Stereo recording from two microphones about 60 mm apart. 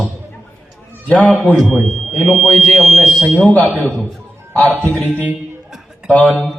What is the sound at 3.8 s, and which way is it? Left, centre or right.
Speech, centre.